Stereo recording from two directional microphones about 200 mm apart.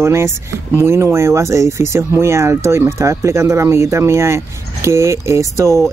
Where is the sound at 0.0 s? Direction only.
15° right (ahead or behind).